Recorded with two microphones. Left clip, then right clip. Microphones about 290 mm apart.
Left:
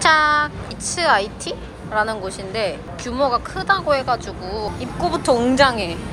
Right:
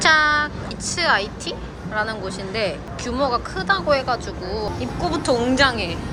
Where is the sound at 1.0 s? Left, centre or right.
Centre.